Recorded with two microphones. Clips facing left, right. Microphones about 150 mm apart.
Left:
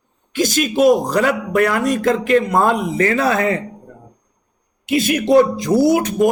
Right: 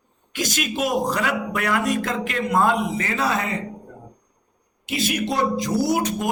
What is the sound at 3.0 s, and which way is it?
Speech, 60° left (ahead or behind).